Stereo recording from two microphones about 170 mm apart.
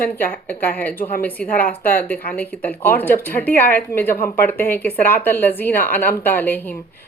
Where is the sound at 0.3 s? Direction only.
10° left (ahead or behind).